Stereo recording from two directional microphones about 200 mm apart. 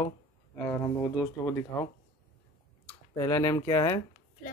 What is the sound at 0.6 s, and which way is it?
Speech, 10° left (ahead or behind).